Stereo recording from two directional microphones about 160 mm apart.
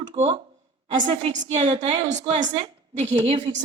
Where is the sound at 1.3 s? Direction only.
45° right (ahead or behind).